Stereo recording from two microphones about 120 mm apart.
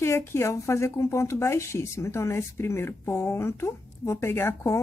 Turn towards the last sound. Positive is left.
turn(degrees=20)  # may be behind; listen again after turning